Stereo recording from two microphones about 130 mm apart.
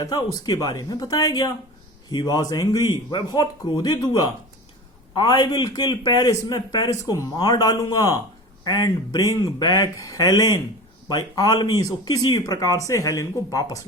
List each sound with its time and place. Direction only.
0.0 s a man's voice: 30° left (ahead or behind)